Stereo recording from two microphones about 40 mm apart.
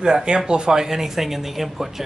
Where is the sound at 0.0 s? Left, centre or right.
Centre.